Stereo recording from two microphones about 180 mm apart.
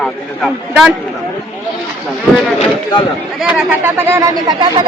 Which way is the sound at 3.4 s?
10° right (ahead or behind).